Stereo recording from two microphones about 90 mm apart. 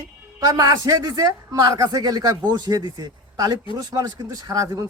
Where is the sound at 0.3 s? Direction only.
45° right (ahead or behind).